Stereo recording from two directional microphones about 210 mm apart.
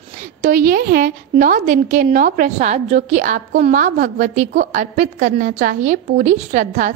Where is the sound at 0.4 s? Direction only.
45° right (ahead or behind).